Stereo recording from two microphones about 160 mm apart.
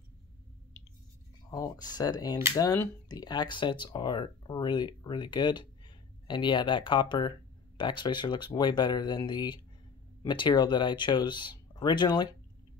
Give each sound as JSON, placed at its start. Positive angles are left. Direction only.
{"t": 1.5, "sound": "speech", "side_deg": 25}